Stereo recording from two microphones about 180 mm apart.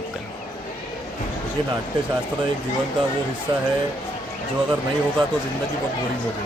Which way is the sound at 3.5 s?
25° right (ahead or behind).